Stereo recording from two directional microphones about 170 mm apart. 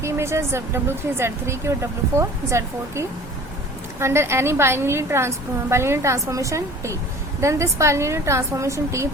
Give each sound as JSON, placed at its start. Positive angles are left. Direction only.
{"t": 0.0, "sound": "speech", "side_deg": -15}